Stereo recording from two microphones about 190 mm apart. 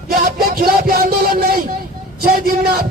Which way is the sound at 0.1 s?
50° right (ahead or behind).